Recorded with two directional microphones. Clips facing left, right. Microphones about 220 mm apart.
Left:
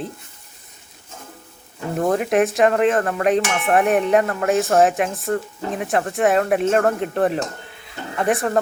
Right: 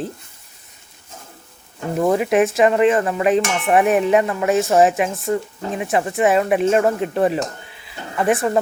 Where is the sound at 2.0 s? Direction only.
5° right (ahead or behind).